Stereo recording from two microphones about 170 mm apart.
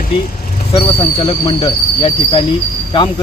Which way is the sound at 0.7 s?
30° left (ahead or behind).